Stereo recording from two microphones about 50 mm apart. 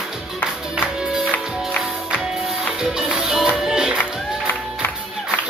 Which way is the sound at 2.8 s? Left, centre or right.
Centre.